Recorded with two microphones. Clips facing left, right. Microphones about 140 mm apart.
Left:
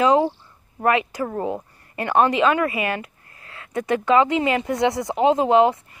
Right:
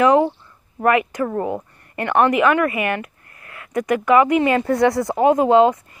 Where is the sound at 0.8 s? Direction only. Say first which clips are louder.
Right 3 dB; 25° left (ahead or behind).